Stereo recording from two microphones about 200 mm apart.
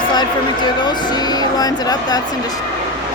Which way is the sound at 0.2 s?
20° left (ahead or behind).